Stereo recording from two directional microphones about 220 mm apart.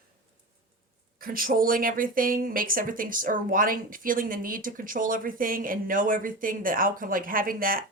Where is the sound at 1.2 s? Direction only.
40° right (ahead or behind).